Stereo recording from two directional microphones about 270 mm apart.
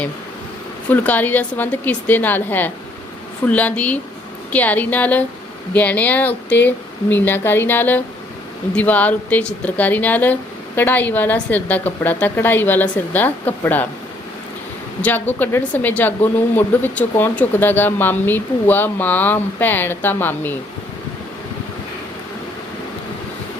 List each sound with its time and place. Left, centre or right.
0.9 s a woman's voice: centre
15.0 s a woman's voice: centre